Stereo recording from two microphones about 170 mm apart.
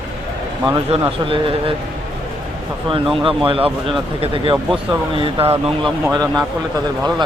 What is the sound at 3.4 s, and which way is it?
Speech, 35° right (ahead or behind).